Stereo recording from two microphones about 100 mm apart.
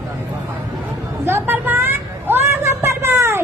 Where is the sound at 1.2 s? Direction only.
20° right (ahead or behind).